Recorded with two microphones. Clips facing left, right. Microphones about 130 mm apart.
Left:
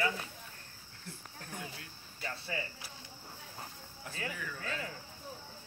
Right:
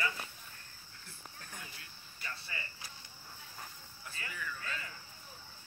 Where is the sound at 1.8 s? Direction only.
90° left.